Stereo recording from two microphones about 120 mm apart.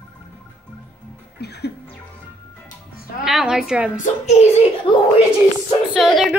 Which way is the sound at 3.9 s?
70° left (ahead or behind).